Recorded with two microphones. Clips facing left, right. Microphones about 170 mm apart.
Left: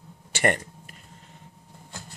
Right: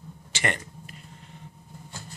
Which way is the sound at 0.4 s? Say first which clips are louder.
Left 6 dB; 50° left (ahead or behind).